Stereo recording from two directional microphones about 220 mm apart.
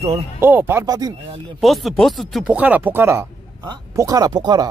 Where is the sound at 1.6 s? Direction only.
Centre (ahead or behind).